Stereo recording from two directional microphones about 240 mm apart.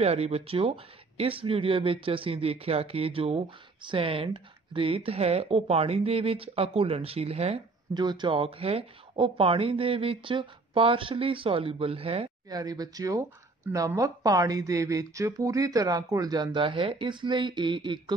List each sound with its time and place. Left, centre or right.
0.0 s speech: right